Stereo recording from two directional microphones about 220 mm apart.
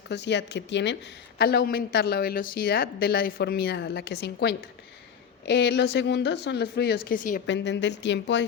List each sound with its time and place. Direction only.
0.1 s speech: 50° left (ahead or behind)
7.4 s speech: 55° left (ahead or behind)